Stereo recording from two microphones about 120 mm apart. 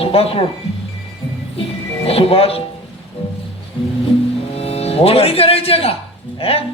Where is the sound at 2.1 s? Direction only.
55° left (ahead or behind).